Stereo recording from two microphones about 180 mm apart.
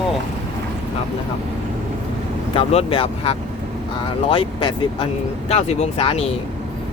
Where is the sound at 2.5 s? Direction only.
35° left (ahead or behind).